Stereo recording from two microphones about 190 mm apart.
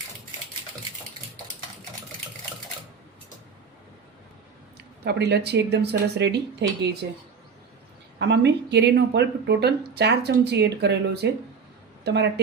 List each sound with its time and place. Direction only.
4.8 s speech: 60° right (ahead or behind)
8.2 s speech: 65° right (ahead or behind)